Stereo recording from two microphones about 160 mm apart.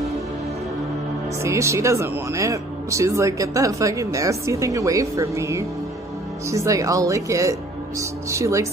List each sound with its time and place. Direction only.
1.4 s speech: 15° right (ahead or behind)